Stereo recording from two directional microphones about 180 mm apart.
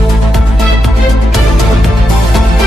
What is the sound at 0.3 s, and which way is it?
Music, centre (ahead or behind).